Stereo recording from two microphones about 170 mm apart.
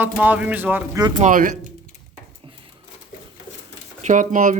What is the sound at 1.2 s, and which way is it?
Speech, 50° right (ahead or behind).